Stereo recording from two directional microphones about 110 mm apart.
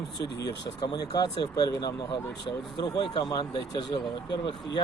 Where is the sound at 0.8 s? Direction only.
35° left (ahead or behind).